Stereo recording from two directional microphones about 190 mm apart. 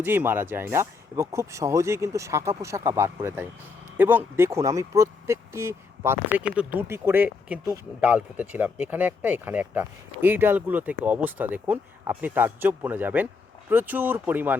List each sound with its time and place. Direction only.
0.0 s speech: 10° right (ahead or behind)
7.6 s speech: 15° right (ahead or behind)